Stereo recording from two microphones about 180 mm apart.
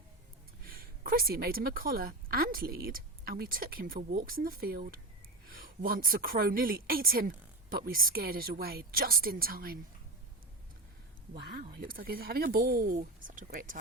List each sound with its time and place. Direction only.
0.6 s a woman's voice: 55° right (ahead or behind)
11.4 s a woman's voice: 55° right (ahead or behind)